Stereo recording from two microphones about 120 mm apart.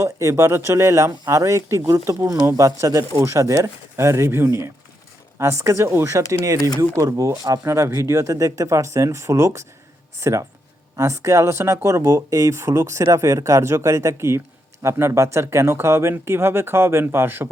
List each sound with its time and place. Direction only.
0.0 s speech: 25° right (ahead or behind)